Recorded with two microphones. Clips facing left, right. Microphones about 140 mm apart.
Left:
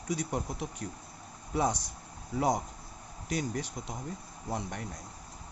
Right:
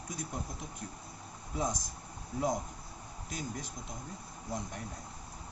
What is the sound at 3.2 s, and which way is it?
Speech, 75° left (ahead or behind).